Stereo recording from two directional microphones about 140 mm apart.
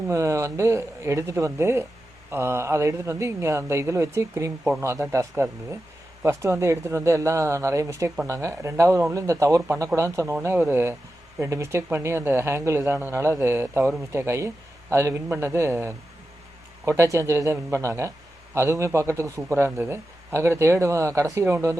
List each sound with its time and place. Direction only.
0.1 s speech: 20° right (ahead or behind)